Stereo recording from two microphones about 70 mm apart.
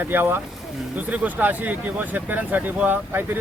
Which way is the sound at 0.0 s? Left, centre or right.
Right.